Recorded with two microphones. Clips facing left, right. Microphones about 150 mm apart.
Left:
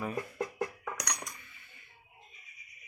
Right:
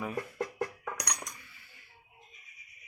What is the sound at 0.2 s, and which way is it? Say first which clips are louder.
Music: even; 10° left (ahead or behind).